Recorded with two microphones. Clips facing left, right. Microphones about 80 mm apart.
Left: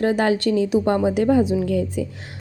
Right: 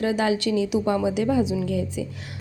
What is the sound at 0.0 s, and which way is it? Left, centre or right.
A woman's voice, left.